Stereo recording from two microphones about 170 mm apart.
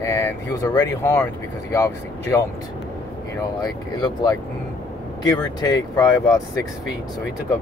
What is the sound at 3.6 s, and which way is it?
Speech, 25° left (ahead or behind).